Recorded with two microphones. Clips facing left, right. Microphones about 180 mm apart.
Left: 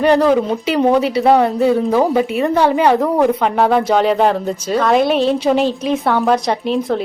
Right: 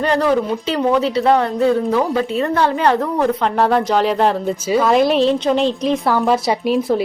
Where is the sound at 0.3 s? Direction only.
20° left (ahead or behind).